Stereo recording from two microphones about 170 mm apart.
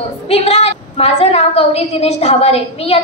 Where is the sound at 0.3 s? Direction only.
40° left (ahead or behind).